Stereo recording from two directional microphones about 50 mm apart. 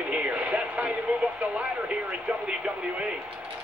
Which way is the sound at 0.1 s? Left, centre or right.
Right.